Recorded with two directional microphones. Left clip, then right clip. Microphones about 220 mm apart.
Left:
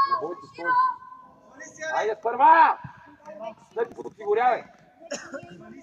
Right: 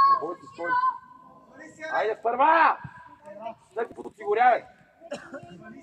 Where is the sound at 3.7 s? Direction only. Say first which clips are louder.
Left 3 dB; 50° right (ahead or behind).